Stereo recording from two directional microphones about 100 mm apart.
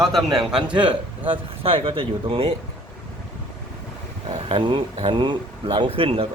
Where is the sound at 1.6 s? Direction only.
65° right (ahead or behind).